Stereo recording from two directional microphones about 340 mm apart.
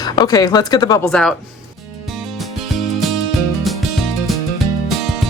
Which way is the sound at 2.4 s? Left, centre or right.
Centre.